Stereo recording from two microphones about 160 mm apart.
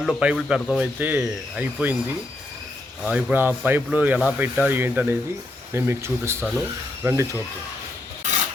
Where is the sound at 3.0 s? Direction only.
10° right (ahead or behind).